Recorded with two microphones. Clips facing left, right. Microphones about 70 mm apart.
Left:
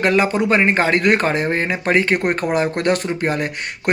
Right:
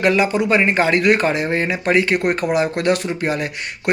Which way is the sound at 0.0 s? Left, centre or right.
Left.